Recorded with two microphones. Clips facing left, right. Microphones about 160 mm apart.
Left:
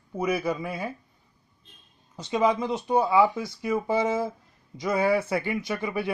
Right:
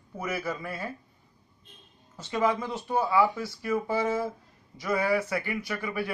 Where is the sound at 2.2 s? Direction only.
20° left (ahead or behind).